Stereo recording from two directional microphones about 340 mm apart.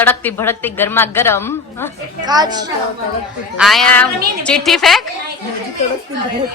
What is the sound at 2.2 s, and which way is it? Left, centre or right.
Speech, centre.